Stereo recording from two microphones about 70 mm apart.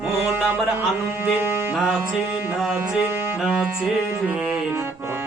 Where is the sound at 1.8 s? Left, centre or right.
Centre.